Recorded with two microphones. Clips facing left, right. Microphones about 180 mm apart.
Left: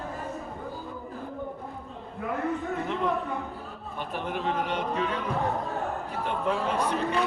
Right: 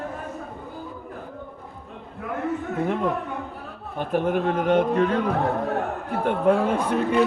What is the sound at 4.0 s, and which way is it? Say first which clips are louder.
Speech: right 9 dB; 50° right (ahead or behind).